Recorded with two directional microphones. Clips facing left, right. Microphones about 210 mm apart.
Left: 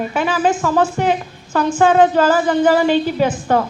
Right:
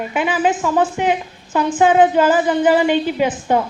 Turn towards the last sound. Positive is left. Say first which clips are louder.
# left 1 dB
turn(degrees=-15)  # may be behind; listen again after turning